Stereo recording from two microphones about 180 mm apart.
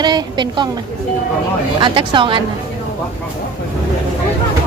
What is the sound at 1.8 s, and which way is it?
Speech, 25° right (ahead or behind).